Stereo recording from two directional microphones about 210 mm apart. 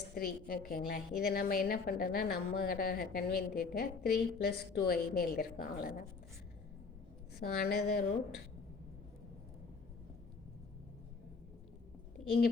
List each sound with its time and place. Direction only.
0.1 s a woman's voice: 45° left (ahead or behind)
7.3 s a woman's voice: 45° left (ahead or behind)